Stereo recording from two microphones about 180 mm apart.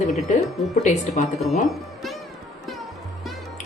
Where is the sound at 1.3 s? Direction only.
Centre (ahead or behind).